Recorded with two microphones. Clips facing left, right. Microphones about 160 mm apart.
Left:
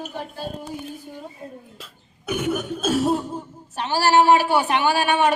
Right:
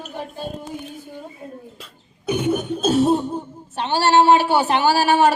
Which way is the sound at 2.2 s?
20° right (ahead or behind).